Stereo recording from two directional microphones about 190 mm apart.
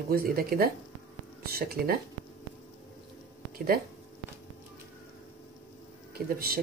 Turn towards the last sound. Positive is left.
turn(degrees=-50)  # may be behind; listen again after turning